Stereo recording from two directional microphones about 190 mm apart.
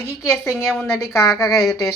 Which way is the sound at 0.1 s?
15° left (ahead or behind).